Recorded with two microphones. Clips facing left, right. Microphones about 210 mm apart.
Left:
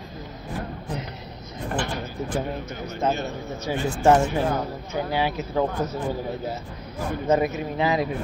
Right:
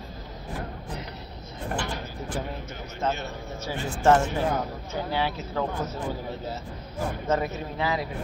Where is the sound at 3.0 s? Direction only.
15° left (ahead or behind).